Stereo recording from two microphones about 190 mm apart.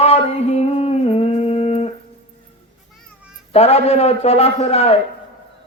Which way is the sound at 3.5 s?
35° left (ahead or behind).